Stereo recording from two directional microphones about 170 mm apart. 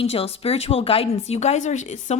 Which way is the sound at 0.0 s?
35° left (ahead or behind).